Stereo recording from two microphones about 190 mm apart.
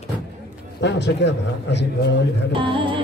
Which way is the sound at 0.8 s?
65° left (ahead or behind).